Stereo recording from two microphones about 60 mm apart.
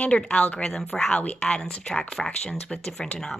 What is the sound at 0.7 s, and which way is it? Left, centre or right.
Speech, centre.